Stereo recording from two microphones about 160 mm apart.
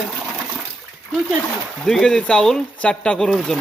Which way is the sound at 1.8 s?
Centre (ahead or behind).